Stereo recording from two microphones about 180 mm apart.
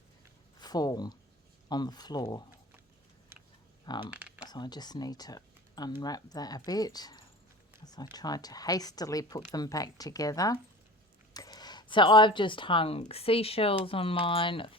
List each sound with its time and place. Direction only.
0.6 s speech: 20° left (ahead or behind)
4.1 s a sound: 5° right (ahead or behind)
4.4 s speech: 25° left (ahead or behind)